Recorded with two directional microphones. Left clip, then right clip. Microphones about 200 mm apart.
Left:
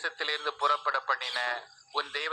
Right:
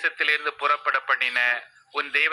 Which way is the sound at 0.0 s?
60° right (ahead or behind).